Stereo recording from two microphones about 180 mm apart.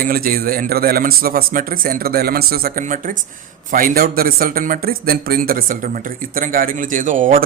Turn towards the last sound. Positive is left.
turn(degrees=-45)  # may be behind; listen again after turning